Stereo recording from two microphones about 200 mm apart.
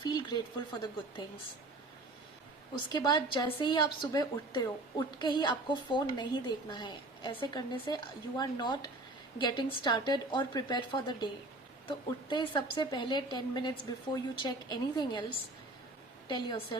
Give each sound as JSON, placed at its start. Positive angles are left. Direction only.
{"t": 0.0, "sound": "speech", "side_deg": 20}
{"t": 2.9, "sound": "a woman's voice", "side_deg": 20}